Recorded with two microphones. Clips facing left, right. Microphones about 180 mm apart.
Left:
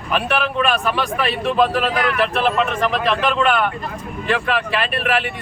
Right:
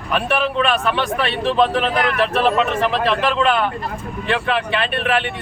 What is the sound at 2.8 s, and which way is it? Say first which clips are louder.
Speech: right 1 dB; centre (ahead or behind).